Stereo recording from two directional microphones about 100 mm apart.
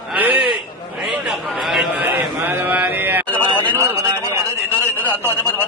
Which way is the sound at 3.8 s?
30° right (ahead or behind).